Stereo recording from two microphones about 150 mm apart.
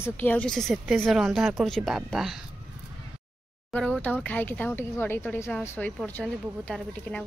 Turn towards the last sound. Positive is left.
turn(degrees=5)  # may be behind; listen again after turning